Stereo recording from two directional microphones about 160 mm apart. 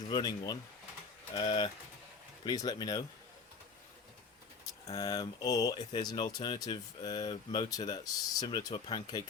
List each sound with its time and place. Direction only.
0.1 s speech: 25° left (ahead or behind)
4.9 s speech: 20° left (ahead or behind)